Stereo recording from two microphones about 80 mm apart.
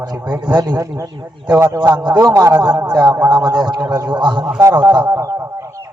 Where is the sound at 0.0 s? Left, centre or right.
Right.